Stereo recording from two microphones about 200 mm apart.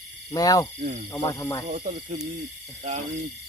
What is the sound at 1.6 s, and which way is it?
Speech, 40° right (ahead or behind).